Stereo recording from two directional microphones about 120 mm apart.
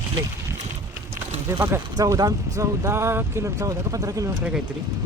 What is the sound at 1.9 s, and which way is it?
Speech, 30° right (ahead or behind).